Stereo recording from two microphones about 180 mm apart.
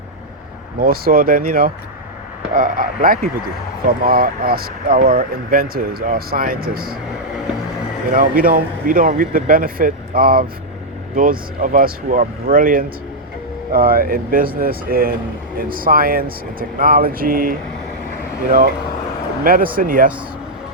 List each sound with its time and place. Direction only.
0.8 s speech: 55° right (ahead or behind)
8.1 s speech: 50° right (ahead or behind)
19.5 s speech: 50° right (ahead or behind)